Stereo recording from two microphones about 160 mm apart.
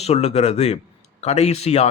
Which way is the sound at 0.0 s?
40° left (ahead or behind).